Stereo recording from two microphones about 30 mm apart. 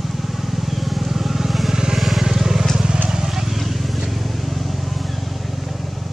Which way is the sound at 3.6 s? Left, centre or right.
Centre.